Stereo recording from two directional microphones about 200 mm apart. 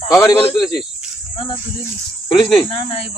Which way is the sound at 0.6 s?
Centre (ahead or behind).